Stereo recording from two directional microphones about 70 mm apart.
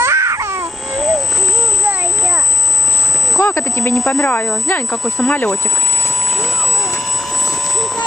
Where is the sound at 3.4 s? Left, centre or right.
Left.